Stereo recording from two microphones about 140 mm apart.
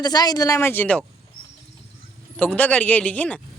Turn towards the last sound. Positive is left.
turn(degrees=10)  # may be behind; listen again after turning